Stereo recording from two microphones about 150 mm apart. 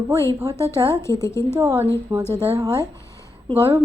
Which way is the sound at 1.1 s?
20° left (ahead or behind).